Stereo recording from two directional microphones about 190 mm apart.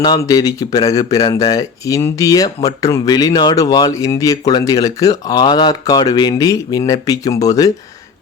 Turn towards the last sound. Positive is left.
turn(degrees=20)  # may be behind; listen again after turning